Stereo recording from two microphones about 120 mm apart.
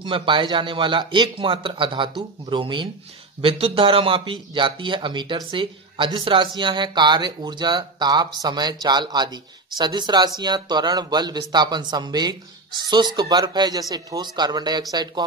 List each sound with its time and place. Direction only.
0.0 s a man's voice: 45° right (ahead or behind)